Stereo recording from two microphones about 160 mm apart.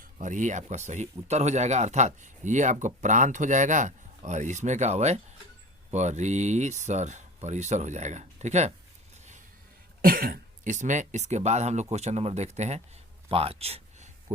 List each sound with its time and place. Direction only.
0.2 s speech: 50° right (ahead or behind)
10.0 s speech: 65° right (ahead or behind); by 12.8 s 45° right (ahead or behind)
13.2 s a sound: 35° right (ahead or behind)